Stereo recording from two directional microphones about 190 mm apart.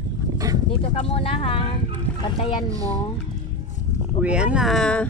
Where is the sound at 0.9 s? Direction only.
30° left (ahead or behind).